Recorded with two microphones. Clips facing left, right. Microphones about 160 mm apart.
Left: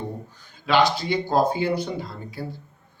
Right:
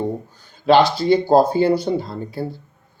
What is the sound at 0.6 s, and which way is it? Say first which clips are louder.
Speech: right 6 dB; 40° right (ahead or behind).